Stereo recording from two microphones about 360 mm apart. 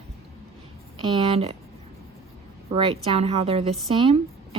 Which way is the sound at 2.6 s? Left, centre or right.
Centre.